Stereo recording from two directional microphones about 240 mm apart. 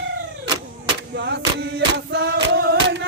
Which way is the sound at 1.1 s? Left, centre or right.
Right.